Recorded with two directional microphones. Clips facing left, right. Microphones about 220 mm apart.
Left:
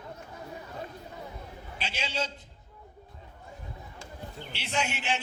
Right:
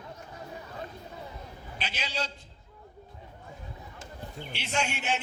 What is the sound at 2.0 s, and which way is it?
Speech, 25° left (ahead or behind).